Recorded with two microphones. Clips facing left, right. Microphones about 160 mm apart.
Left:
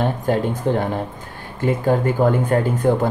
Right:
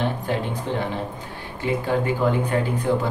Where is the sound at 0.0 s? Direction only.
45° left (ahead or behind).